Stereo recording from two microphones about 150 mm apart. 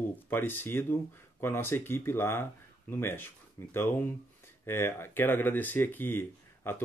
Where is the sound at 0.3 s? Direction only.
15° left (ahead or behind).